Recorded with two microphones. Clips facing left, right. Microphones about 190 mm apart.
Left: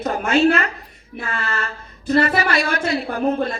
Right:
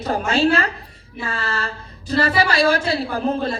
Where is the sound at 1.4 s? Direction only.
30° right (ahead or behind).